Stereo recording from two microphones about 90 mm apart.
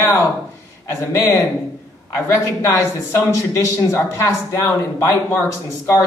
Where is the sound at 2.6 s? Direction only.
30° left (ahead or behind).